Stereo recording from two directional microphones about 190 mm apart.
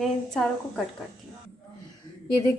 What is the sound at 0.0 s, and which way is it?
Speech, centre (ahead or behind).